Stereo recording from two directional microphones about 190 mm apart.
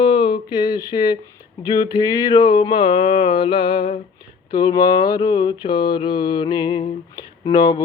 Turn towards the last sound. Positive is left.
turn(degrees=20)  # may be behind; listen again after turning